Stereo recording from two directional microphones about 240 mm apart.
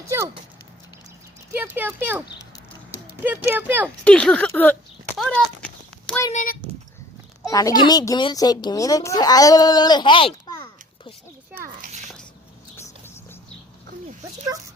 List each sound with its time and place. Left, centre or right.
1.5 s speech: centre
3.2 s speech: centre
4.0 s a sound: centre
6.3 s speech: left
7.4 s a child's voice: centre
11.6 s a sound: right